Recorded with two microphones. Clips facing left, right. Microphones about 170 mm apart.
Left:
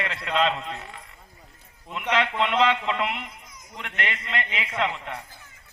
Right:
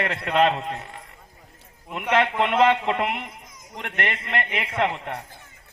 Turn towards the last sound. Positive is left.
turn(degrees=-50)  # may be behind; listen again after turning